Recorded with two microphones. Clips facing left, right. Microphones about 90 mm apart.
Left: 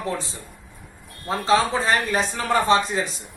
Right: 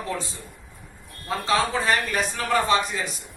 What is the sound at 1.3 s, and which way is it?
Speech, 30° left (ahead or behind).